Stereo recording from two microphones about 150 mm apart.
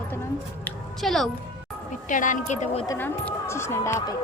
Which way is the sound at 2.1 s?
60° left (ahead or behind).